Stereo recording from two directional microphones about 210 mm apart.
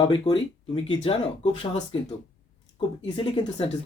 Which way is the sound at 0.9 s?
30° left (ahead or behind).